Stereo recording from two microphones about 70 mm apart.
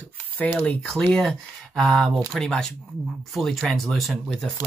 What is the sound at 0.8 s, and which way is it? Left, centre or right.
Speech, centre.